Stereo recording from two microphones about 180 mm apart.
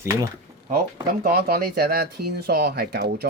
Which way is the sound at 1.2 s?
55° right (ahead or behind).